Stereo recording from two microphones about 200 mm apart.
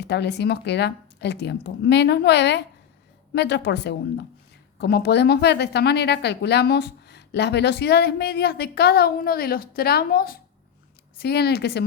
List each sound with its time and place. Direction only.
0.0 s a woman's voice: 60° left (ahead or behind)